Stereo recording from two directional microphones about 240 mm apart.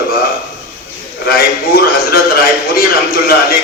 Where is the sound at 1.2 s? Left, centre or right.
Left.